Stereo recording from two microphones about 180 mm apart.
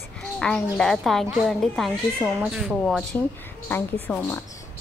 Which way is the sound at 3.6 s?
10° left (ahead or behind).